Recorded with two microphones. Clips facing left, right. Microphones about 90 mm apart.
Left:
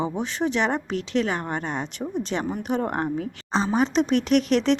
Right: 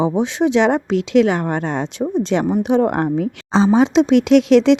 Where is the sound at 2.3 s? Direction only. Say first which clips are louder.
Right 11 dB; 80° right.